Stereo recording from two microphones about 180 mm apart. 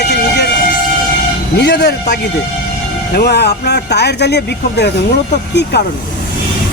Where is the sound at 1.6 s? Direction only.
70° left (ahead or behind).